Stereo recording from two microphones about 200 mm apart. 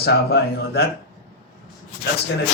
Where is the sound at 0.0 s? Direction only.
55° left (ahead or behind).